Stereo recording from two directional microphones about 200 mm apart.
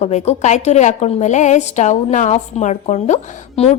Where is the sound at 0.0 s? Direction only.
35° left (ahead or behind).